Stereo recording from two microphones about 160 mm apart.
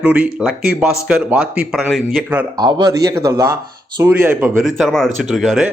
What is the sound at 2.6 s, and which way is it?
Speech, 25° right (ahead or behind).